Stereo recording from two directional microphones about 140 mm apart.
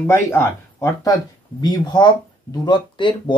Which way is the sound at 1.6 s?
30° left (ahead or behind).